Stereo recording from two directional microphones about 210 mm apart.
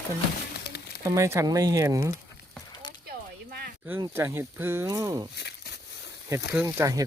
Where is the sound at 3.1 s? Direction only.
45° right (ahead or behind).